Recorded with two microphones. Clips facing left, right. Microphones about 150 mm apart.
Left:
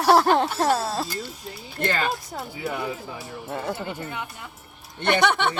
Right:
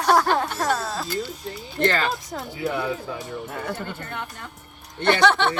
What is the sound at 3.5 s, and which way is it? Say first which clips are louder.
Speech: left 4 dB; 25° left (ahead or behind).